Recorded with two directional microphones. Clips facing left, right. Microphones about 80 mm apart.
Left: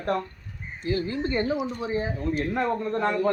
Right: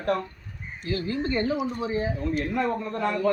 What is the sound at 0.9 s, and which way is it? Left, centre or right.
Speech, left.